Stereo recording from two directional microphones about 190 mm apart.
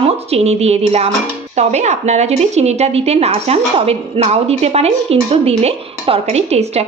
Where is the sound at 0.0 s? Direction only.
35° right (ahead or behind).